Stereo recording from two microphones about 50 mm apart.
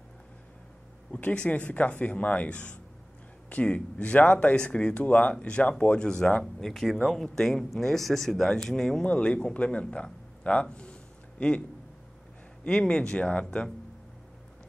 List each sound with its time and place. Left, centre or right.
1.2 s speech: centre
6.4 s speech: centre
9.0 s speech: left
12.6 s speech: left